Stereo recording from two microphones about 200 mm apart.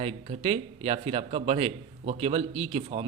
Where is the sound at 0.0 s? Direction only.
30° right (ahead or behind).